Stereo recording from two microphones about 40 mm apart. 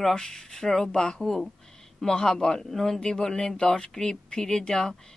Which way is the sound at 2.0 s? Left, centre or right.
Centre.